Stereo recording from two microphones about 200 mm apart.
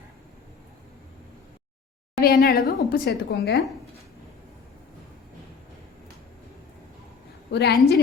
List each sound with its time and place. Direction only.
2.2 s a woman's voice: 50° left (ahead or behind)
7.5 s a woman's voice: 55° left (ahead or behind)